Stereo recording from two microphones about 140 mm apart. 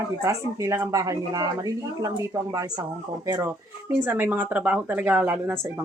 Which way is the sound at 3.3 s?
20° right (ahead or behind).